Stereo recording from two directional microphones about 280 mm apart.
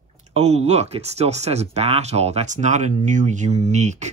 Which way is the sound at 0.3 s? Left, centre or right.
Right.